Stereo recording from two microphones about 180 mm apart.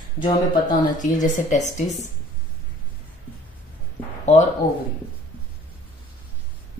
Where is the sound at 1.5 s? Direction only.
40° left (ahead or behind).